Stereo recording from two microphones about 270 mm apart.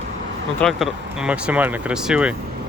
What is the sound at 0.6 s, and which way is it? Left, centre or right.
Speech, centre.